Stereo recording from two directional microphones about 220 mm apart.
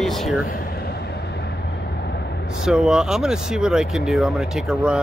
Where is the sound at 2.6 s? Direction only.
Centre (ahead or behind).